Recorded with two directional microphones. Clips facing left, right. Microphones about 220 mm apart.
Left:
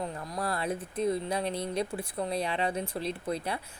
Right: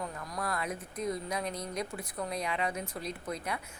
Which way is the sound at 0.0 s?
30° left (ahead or behind).